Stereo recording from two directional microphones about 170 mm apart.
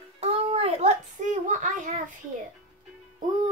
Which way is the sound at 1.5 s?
50° right (ahead or behind).